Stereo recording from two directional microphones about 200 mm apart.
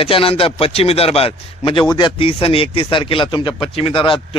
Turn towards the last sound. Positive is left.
turn(degrees=25)  # may be behind; listen again after turning